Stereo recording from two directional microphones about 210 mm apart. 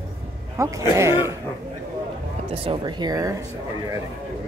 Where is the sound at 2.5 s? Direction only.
25° right (ahead or behind).